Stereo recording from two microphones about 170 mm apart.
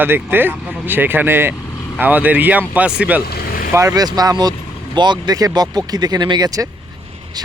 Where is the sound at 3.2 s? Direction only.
65° left (ahead or behind).